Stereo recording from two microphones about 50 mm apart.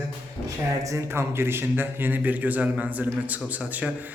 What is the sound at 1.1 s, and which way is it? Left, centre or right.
A man's voice, right.